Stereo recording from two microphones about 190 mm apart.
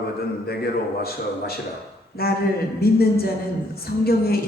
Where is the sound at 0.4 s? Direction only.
55° left (ahead or behind).